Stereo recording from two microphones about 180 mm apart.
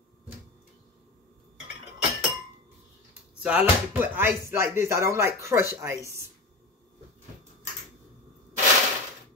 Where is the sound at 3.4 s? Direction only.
5° right (ahead or behind).